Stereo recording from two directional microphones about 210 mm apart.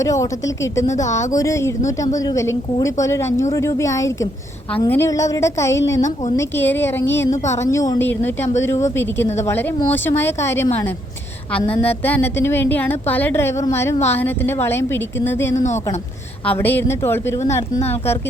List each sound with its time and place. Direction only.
0.0 s a woman's voice: 15° left (ahead or behind)
6.0 s a woman's voice: 35° left (ahead or behind)
6.3 s a woman's voice: 10° left (ahead or behind)
12.0 s a woman's voice: 10° left (ahead or behind)